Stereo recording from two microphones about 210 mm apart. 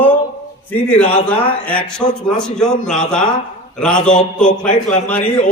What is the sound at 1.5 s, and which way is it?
A man's voice, 5° left (ahead or behind).